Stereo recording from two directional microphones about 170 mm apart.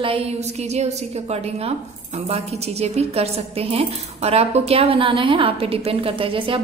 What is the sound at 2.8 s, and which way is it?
A woman's voice, 40° right (ahead or behind).